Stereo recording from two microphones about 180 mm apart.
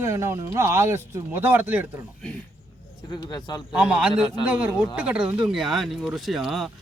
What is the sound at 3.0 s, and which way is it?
Speech, 25° left (ahead or behind).